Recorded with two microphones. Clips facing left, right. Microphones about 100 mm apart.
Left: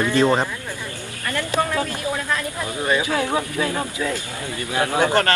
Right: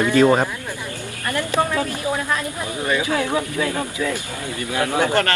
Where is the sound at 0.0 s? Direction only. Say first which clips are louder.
Right 3 dB; 15° right (ahead or behind).